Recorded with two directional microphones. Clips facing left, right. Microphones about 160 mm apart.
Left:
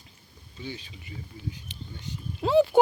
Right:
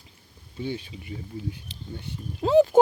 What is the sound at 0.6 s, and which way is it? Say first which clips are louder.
Speech: right 7 dB; 55° right (ahead or behind).